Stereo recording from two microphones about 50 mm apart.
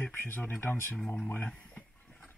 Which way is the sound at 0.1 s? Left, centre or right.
Left.